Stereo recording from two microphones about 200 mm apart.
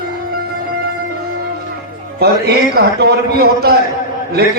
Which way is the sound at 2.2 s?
50° right (ahead or behind).